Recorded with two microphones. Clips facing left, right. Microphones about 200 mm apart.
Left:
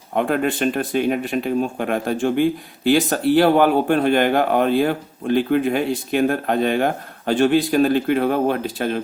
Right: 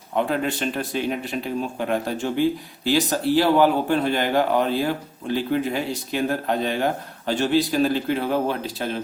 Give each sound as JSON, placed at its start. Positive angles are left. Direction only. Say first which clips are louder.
{"t": 0.2, "sound": "speech", "louder": "left 4 dB", "side_deg": 55}